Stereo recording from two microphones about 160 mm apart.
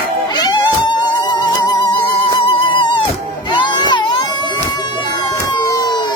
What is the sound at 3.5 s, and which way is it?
Crowd, 30° left (ahead or behind).